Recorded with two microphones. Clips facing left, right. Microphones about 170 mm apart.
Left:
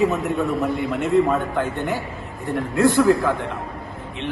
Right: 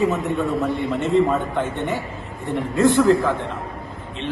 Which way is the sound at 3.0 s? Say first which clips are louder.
Even; centre (ahead or behind).